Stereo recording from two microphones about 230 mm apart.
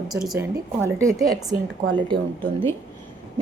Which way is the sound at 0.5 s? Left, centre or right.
Centre.